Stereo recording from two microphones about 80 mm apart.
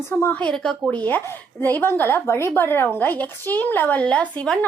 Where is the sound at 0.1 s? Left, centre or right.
Left.